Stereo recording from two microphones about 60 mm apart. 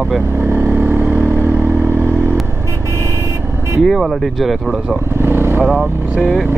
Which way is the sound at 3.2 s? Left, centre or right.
Right.